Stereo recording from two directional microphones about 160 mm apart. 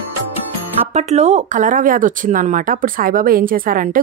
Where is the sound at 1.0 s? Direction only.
45° right (ahead or behind).